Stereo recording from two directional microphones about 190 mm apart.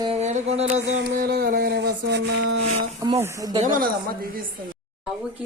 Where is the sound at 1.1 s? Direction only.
55° right (ahead or behind).